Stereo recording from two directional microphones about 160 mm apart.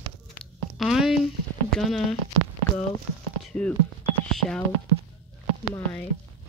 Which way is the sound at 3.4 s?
5° left (ahead or behind).